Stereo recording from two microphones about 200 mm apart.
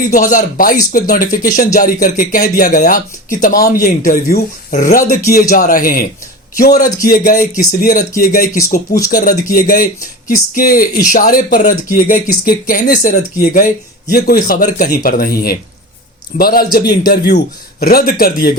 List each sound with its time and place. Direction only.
0.1 s speech: 45° left (ahead or behind)